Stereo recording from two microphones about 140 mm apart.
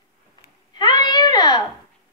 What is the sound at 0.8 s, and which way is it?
Speech, 30° left (ahead or behind).